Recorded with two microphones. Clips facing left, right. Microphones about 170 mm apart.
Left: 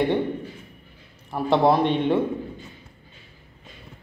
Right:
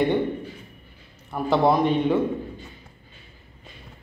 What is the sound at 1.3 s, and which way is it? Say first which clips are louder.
Speech: left 1 dB; centre (ahead or behind).